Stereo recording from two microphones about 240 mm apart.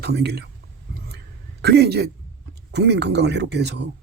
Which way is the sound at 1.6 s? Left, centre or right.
Right.